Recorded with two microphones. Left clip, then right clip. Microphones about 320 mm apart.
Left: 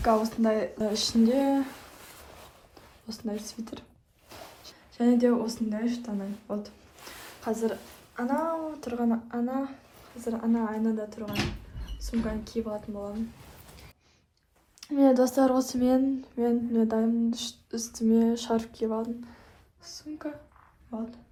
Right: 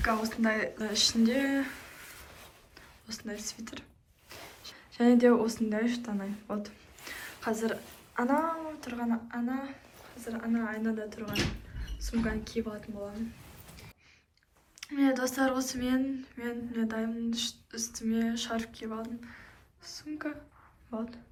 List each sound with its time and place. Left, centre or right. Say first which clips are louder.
0.0 s speech: left 5 dB; centre
2.7 s speech: even; centre
4.3 s a sound: left 1 dB; centre
8.8 s speech: left 5 dB; centre
14.8 s speech: left 7 dB; centre